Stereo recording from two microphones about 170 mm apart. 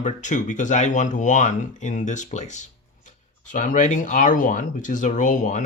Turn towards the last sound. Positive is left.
turn(degrees=50)  # may be behind; listen again after turning